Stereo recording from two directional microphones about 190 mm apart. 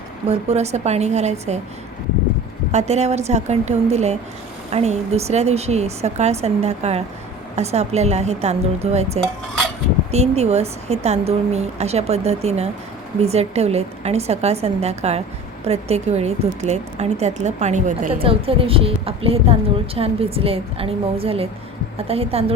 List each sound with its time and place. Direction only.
0.3 s a woman's voice: 35° right (ahead or behind)
2.7 s a woman's voice: 35° right (ahead or behind)
18.1 s a woman's voice: 30° right (ahead or behind)